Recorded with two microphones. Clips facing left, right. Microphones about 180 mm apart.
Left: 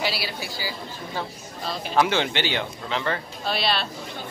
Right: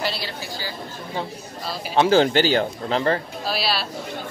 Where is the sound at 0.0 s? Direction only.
10° left (ahead or behind).